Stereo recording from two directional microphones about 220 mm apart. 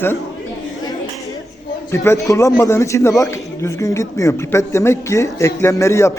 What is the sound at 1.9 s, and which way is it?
A man's voice, 15° left (ahead or behind).